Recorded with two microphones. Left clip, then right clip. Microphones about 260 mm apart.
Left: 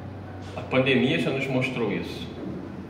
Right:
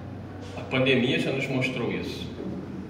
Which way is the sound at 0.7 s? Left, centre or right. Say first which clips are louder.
Left 1 dB; left.